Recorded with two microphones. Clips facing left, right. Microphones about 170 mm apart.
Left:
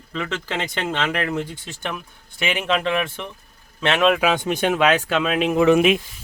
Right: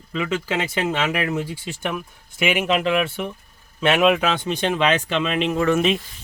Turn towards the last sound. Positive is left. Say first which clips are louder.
# left 4 dB
turn(degrees=15)  # may be behind; listen again after turning